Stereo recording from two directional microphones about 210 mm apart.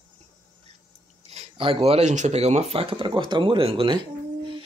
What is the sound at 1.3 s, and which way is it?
A child's voice, 25° right (ahead or behind).